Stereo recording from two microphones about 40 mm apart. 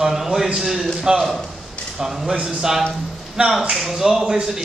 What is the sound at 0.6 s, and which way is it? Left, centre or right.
Speech, centre.